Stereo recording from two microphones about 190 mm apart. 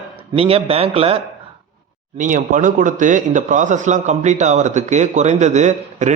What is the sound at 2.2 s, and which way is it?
A man's voice, 45° right (ahead or behind).